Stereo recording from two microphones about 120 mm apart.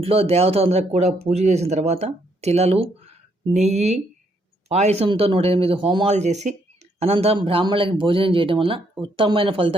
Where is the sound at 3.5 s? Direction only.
70° right (ahead or behind).